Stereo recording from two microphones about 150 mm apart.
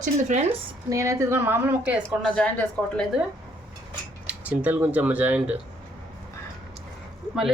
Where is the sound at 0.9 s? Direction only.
20° right (ahead or behind).